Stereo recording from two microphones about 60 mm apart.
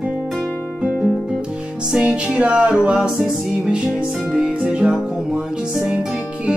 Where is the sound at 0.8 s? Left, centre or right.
Centre.